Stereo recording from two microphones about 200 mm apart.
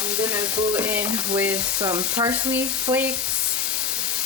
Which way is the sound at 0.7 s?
10° right (ahead or behind).